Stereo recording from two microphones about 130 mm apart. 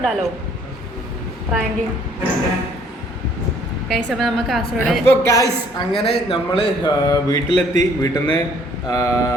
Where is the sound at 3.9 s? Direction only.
Centre (ahead or behind).